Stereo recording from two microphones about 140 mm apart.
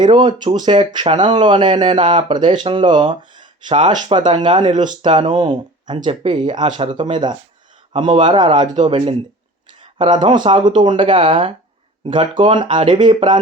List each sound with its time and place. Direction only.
0.0 s speech: 30° right (ahead or behind)